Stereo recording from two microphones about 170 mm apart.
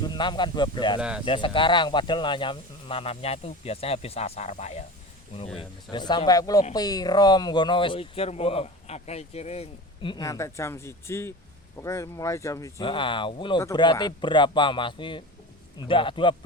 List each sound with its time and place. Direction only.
0.0 s speech: 25° left (ahead or behind)
0.9 s speech: 5° right (ahead or behind)
1.2 s speech: 30° left (ahead or behind)
5.5 s speech: 25° left (ahead or behind)
12.8 s speech: 30° left (ahead or behind)